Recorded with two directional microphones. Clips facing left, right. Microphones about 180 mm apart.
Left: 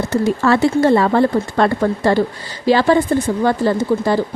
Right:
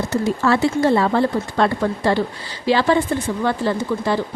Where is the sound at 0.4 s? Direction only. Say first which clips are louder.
Left 3 dB; 55° left (ahead or behind).